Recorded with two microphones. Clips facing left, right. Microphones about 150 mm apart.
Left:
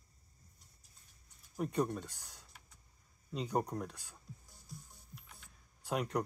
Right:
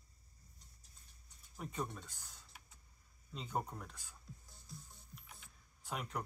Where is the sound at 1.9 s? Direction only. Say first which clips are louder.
Left 9 dB; 70° left (ahead or behind).